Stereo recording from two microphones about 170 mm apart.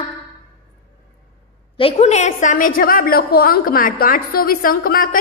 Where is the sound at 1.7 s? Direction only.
35° left (ahead or behind).